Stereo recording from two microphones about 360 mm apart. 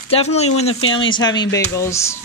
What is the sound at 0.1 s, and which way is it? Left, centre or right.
Speech, centre.